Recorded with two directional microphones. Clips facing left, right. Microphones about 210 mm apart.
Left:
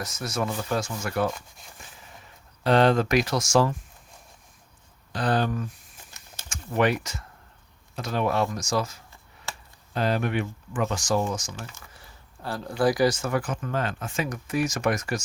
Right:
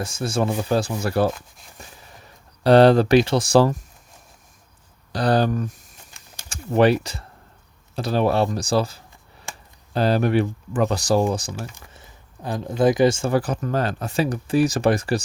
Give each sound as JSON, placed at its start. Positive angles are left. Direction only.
{"t": 0.0, "sound": "speech", "side_deg": -30}
{"t": 1.3, "sound": "speech", "side_deg": 0}
{"t": 2.6, "sound": "speech", "side_deg": -35}
{"t": 5.1, "sound": "speech", "side_deg": -35}
{"t": 11.7, "sound": "speech", "side_deg": -20}